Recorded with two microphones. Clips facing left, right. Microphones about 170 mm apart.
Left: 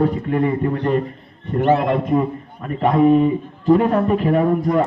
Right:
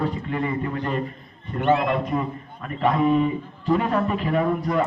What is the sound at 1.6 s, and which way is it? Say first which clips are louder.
A man's voice: left 4 dB; 35° left (ahead or behind).